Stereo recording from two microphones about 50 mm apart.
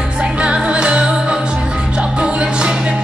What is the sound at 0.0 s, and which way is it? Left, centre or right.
Music, centre.